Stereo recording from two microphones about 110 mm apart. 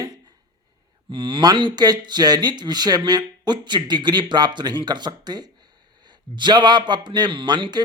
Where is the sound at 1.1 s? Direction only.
50° right (ahead or behind).